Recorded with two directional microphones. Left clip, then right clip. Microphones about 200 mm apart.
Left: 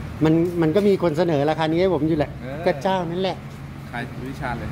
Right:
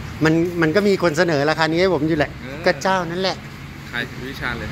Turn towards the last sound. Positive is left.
turn(degrees=5)  # may be behind; listen again after turning